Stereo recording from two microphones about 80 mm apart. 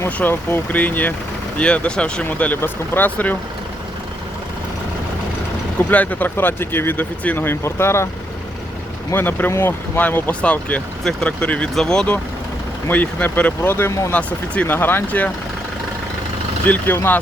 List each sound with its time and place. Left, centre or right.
0.2 s speech: left
2.5 s speech: left
5.9 s speech: left
9.1 s speech: left; by 12.1 s centre
12.9 s speech: left
14.1 s speech: centre
16.6 s speech: left